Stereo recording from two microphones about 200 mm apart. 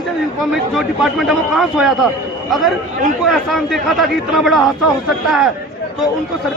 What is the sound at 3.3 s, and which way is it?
A man's voice, centre (ahead or behind).